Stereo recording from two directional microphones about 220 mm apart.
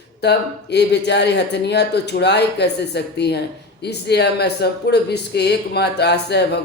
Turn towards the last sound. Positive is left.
turn(degrees=50)  # may be behind; listen again after turning